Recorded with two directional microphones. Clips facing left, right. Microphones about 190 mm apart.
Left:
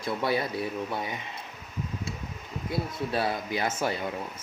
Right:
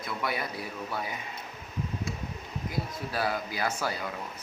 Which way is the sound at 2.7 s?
25° left (ahead or behind).